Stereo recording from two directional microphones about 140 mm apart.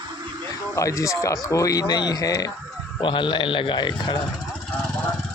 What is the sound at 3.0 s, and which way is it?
Speech, 35° left (ahead or behind).